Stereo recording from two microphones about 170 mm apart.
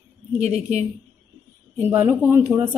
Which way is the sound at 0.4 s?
40° right (ahead or behind).